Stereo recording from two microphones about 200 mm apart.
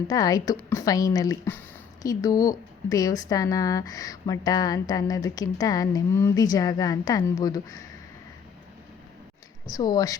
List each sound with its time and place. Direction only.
0.1 s speech: 20° left (ahead or behind)
9.6 s speech: 20° left (ahead or behind)